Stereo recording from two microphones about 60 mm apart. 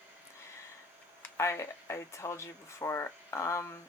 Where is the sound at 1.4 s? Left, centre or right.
Left.